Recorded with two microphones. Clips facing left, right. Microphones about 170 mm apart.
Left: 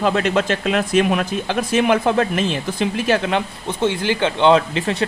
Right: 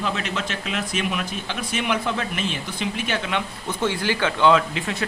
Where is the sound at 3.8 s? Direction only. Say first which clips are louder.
Left 4 dB; 20° left (ahead or behind).